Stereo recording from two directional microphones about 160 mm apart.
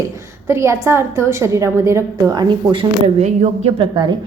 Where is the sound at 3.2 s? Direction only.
45° right (ahead or behind).